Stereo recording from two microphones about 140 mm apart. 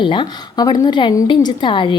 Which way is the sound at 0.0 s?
35° left (ahead or behind).